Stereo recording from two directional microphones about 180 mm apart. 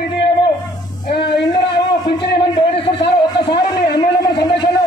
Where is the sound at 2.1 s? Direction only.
30° left (ahead or behind).